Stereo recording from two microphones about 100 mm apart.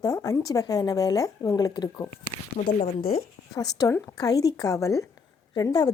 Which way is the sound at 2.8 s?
90° left.